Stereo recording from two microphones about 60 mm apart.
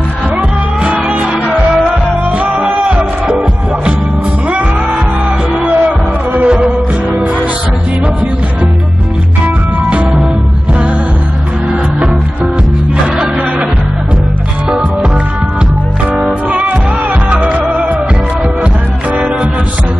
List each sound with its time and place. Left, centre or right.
0.4 s music: right
2.5 s music: centre
5.9 s music: right
16.4 s music: right